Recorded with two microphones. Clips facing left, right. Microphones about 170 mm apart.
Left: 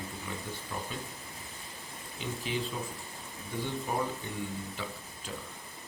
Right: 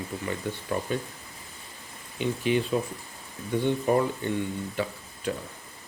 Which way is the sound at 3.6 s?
70° right (ahead or behind).